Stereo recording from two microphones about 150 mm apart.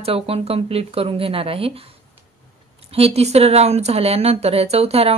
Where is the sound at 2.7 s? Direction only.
40° right (ahead or behind).